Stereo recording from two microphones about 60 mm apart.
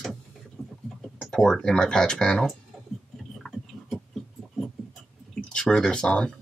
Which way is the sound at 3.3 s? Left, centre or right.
Centre.